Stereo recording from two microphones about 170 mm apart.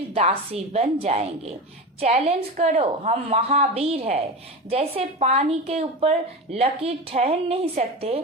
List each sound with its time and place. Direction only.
0.1 s a woman's voice: 35° right (ahead or behind)